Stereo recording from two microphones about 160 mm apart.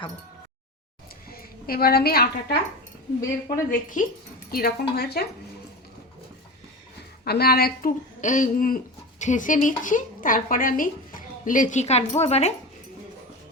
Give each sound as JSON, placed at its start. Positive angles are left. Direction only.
{"t": 1.3, "sound": "a woman's voice", "side_deg": 70}
{"t": 3.7, "sound": "speech", "side_deg": 55}
{"t": 4.5, "sound": "speech", "side_deg": 75}
{"t": 7.3, "sound": "speech", "side_deg": 80}